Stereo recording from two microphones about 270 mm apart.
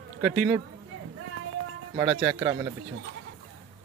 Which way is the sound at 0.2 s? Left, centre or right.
Centre.